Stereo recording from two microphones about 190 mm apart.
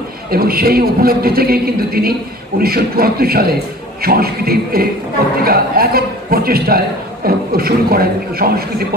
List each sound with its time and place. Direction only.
0.3 s a man's voice: 50° right (ahead or behind)